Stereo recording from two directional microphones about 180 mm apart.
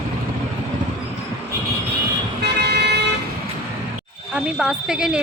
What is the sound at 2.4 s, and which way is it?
Vehicle, 65° right (ahead or behind).